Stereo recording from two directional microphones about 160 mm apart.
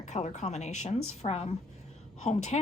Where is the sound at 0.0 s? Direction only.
45° left (ahead or behind).